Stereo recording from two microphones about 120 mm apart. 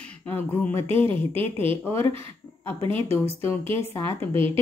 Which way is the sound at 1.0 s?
50° right (ahead or behind).